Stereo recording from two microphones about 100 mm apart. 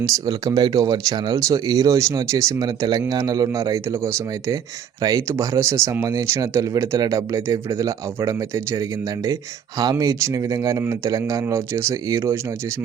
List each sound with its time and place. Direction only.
0.0 s speech: 40° right (ahead or behind)